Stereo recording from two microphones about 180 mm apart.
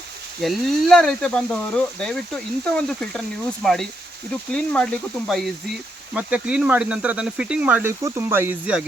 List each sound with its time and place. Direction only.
0.4 s speech: 5° left (ahead or behind)
6.1 s speech: 5° right (ahead or behind)